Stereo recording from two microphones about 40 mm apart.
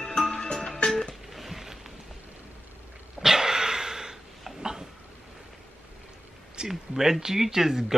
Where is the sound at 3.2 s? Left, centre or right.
Centre.